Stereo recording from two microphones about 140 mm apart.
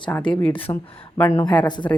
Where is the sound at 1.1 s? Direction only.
15° left (ahead or behind).